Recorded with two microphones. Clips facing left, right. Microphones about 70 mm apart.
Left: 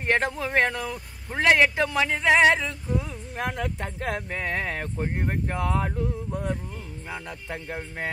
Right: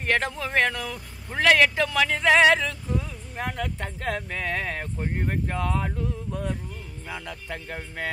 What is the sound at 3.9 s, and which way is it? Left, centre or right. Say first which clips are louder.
Speech: even; left.